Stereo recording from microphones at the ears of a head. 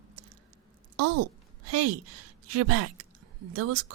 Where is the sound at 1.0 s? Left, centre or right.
Right.